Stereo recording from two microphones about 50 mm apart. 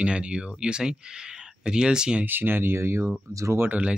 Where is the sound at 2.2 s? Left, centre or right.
Right.